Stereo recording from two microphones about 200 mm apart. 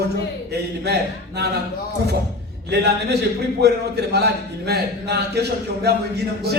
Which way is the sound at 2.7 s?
55° right (ahead or behind).